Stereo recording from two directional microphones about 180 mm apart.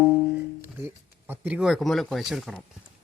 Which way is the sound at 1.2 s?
10° right (ahead or behind).